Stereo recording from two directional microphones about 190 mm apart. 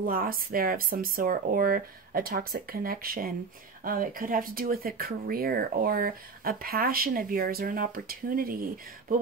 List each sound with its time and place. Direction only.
0.0 s speech: 50° right (ahead or behind)